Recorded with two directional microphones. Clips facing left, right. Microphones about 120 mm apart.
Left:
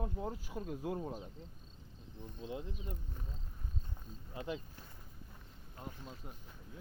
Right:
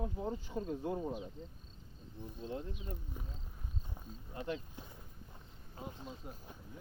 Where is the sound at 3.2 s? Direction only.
10° right (ahead or behind).